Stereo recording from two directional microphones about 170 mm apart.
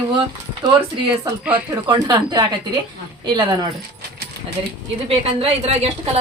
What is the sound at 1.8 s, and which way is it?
Speech, 25° right (ahead or behind).